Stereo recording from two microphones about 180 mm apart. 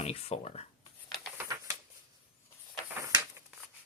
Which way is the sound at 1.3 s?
15° right (ahead or behind).